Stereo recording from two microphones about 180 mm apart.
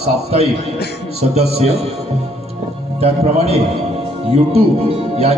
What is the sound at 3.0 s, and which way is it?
Speech, 35° right (ahead or behind).